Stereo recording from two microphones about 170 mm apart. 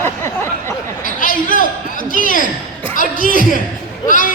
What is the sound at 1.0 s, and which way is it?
A man's voice, 50° left (ahead or behind).